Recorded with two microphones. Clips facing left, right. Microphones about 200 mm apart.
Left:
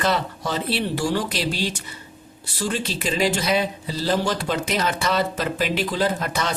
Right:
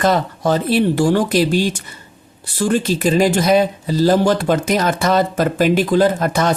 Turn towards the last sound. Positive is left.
turn(degrees=-50)  # may be behind; listen again after turning